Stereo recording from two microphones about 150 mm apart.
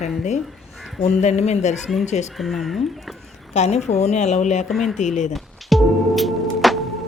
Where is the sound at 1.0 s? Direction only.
45° left (ahead or behind).